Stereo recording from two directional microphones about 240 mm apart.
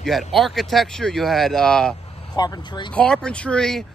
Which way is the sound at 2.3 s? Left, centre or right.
Centre.